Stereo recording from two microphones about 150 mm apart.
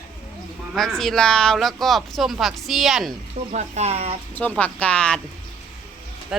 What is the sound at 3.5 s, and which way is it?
Speech, 50° right (ahead or behind).